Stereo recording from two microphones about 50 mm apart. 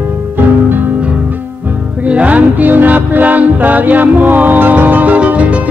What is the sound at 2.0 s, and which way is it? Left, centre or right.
Music, right.